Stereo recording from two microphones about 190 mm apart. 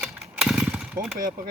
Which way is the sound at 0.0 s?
Centre (ahead or behind).